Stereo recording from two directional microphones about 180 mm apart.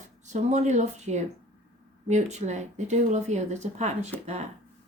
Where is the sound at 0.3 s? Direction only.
40° right (ahead or behind).